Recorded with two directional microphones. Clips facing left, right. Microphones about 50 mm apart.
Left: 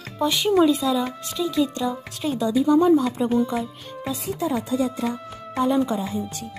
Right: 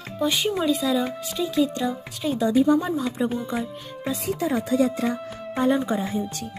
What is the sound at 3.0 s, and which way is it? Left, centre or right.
Speech, centre.